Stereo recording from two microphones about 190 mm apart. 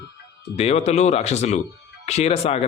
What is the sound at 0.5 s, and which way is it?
Speech, 35° left (ahead or behind).